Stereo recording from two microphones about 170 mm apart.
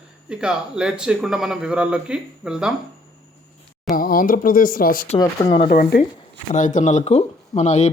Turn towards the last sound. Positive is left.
turn(degrees=45)  # may be behind; listen again after turning